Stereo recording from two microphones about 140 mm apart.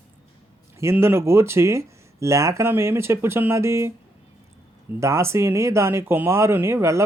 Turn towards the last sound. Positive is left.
turn(degrees=-20)  # may be behind; listen again after turning